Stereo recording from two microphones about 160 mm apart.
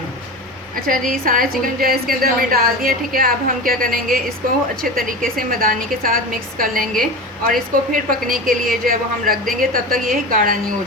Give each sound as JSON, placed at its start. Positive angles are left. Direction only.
{"t": 0.9, "sound": "a woman's voice", "side_deg": -60}